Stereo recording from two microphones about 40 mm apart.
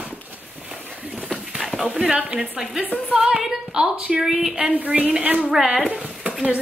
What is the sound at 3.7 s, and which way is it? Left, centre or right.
Speech, right.